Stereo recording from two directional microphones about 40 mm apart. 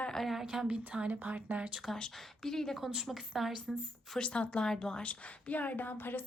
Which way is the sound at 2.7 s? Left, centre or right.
Centre.